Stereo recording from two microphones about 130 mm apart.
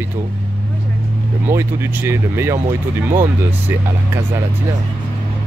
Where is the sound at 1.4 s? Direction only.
20° right (ahead or behind).